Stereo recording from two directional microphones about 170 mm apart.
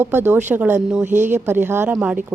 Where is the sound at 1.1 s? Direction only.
45° right (ahead or behind).